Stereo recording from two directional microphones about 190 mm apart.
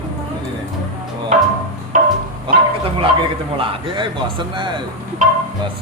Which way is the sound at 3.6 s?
30° right (ahead or behind).